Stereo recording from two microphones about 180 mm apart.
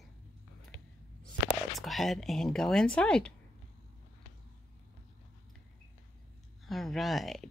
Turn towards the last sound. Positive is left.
turn(degrees=0)  # may be behind; listen again after turning